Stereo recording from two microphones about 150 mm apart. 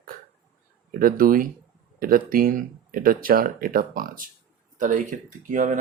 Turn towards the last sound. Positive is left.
turn(degrees=-60)  # may be behind; listen again after turning